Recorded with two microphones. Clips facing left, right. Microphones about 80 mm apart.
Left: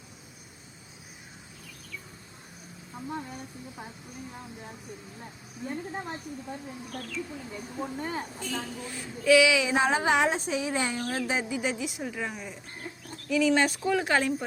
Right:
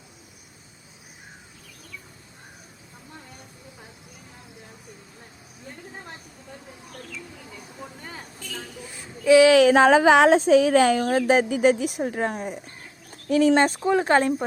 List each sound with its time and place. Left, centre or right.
7.8 s speech: left
8.9 s speech: right
9.4 s speech: right
13.6 s speech: right